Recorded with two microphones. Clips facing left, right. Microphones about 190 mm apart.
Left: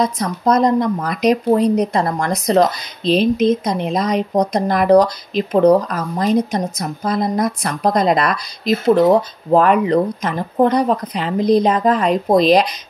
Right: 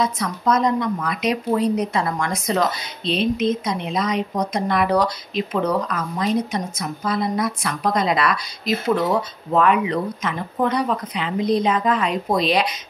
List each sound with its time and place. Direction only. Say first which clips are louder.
0.0 s a woman's voice: left 4 dB; 35° left (ahead or behind)